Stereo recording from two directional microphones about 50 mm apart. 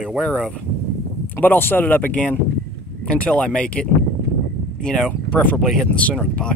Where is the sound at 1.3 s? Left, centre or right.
Left.